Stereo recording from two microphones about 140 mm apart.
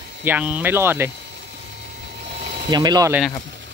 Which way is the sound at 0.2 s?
10° right (ahead or behind).